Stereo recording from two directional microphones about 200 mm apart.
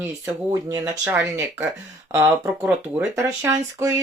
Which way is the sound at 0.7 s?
15° right (ahead or behind).